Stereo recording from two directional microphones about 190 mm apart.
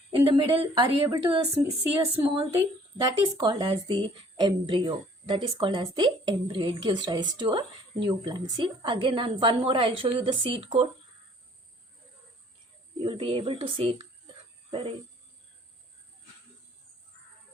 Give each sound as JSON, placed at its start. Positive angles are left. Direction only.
{"t": 0.1, "sound": "speech", "side_deg": -25}
{"t": 13.0, "sound": "speech", "side_deg": -30}